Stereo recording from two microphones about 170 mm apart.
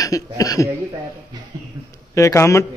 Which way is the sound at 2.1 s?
20° left (ahead or behind).